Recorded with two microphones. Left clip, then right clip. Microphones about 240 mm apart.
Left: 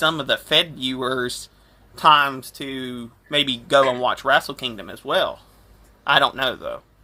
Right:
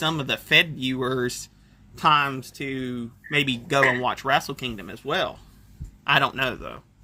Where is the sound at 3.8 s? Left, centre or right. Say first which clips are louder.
Left 2 dB; right.